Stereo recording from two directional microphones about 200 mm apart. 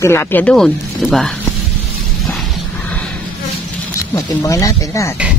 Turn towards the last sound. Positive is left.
turn(degrees=15)  # may be behind; listen again after turning